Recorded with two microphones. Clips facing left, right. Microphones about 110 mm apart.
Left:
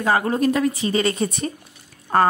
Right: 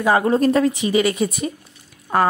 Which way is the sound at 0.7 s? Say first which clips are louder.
Right 3 dB; 15° right (ahead or behind).